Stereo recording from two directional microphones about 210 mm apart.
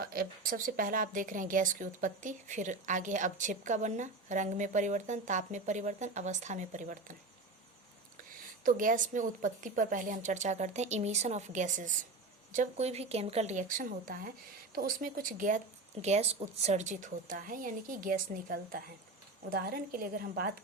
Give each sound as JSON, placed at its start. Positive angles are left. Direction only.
{"t": 0.0, "sound": "speech", "side_deg": -45}
{"t": 8.6, "sound": "a woman's voice", "side_deg": -40}